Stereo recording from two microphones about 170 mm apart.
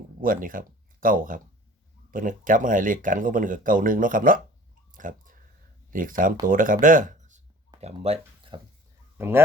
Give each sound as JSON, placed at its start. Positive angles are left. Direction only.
{"t": 0.2, "sound": "speech", "side_deg": -55}
{"t": 4.9, "sound": "a sound", "side_deg": -50}
{"t": 5.9, "sound": "speech", "side_deg": -55}
{"t": 9.1, "sound": "speech", "side_deg": -15}